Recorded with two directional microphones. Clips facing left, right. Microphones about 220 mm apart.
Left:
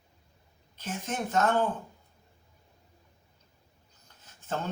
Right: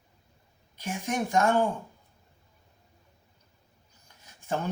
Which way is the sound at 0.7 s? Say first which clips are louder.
Right 4 dB; 10° right (ahead or behind).